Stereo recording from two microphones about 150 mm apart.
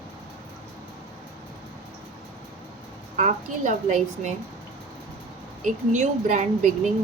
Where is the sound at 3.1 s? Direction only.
55° right (ahead or behind).